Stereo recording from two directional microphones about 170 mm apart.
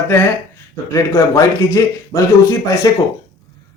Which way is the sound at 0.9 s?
15° left (ahead or behind).